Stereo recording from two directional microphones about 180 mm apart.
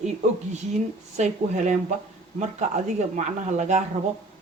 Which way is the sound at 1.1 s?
40° right (ahead or behind).